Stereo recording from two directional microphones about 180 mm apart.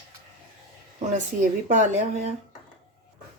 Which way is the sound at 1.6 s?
40° right (ahead or behind).